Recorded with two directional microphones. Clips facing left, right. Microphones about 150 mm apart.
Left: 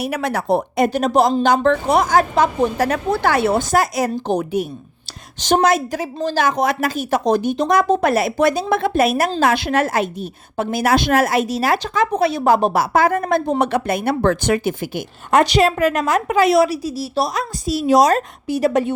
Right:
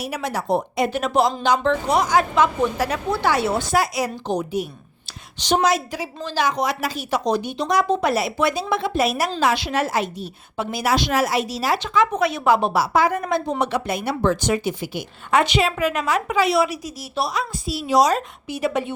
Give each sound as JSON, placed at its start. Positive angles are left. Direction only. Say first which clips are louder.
{"t": 0.0, "sound": "a woman's voice", "louder": "left 5 dB", "side_deg": 60}
{"t": 0.9, "sound": "a woman's voice", "louder": "left 5 dB", "side_deg": 40}
{"t": 11.8, "sound": "a woman's voice", "louder": "left 2 dB", "side_deg": 35}